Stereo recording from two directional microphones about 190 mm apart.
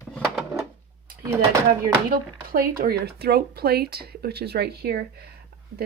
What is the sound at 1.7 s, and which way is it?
Speech, 50° right (ahead or behind).